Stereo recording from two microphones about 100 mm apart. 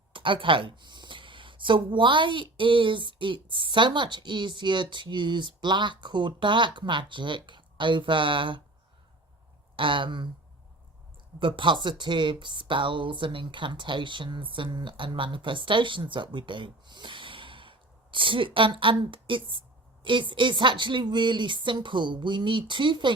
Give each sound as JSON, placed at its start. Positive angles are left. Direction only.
{"t": 0.1, "sound": "speech", "side_deg": -60}
{"t": 9.7, "sound": "speech", "side_deg": -55}
{"t": 11.3, "sound": "speech", "side_deg": -55}